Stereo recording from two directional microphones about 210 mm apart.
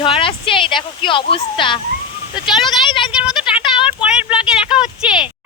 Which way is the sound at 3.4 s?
25° left (ahead or behind).